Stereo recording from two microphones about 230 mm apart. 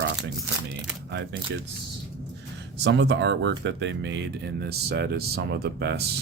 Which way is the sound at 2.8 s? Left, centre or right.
Right.